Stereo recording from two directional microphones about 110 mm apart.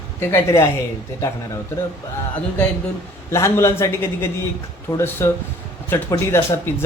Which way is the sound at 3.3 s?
25° left (ahead or behind).